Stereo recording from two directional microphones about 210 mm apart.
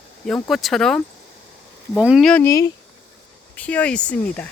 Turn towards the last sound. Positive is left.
turn(degrees=5)  # may be behind; listen again after turning